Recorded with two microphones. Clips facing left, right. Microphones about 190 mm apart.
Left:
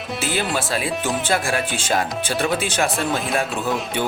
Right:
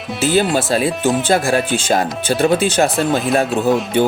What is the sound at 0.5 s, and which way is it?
Speech, 35° right (ahead or behind).